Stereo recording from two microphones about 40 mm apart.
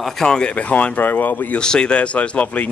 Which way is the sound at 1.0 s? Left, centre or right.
Left.